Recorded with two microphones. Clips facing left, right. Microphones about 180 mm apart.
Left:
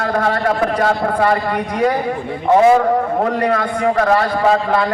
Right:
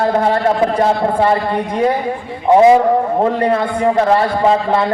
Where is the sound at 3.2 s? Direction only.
25° right (ahead or behind).